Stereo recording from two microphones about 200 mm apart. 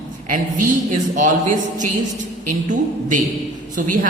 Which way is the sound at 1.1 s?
40° right (ahead or behind).